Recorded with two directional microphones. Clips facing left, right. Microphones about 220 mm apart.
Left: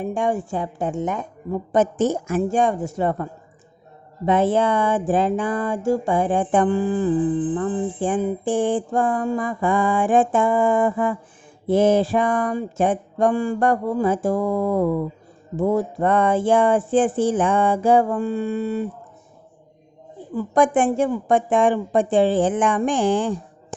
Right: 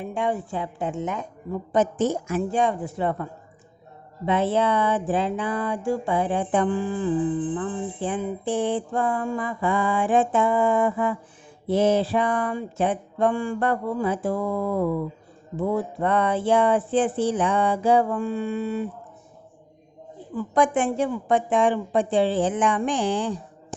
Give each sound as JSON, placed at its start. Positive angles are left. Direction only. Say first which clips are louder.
{"t": 0.0, "sound": "speech", "louder": "left 4 dB", "side_deg": 45}
{"t": 4.3, "sound": "speech", "louder": "left 3 dB", "side_deg": 50}
{"t": 20.3, "sound": "speech", "louder": "left 4 dB", "side_deg": 50}